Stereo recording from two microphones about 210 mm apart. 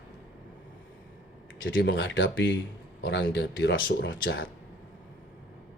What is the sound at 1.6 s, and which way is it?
Speech, 65° left (ahead or behind).